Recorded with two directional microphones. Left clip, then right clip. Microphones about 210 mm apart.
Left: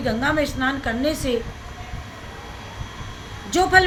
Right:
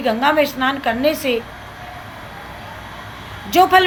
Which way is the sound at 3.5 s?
15° left (ahead or behind).